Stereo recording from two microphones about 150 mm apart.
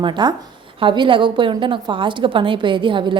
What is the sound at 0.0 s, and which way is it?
A woman's voice, 30° right (ahead or behind).